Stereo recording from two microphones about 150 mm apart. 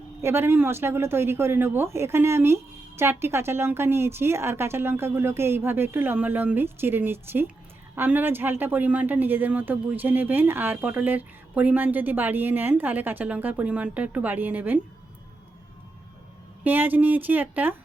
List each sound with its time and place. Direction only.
0.2 s speech: 15° right (ahead or behind)
16.6 s speech: 10° right (ahead or behind)